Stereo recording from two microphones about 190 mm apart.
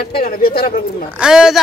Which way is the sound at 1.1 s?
5° right (ahead or behind).